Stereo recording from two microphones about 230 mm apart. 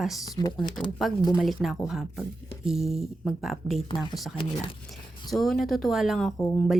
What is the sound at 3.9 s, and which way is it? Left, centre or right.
Speech, left.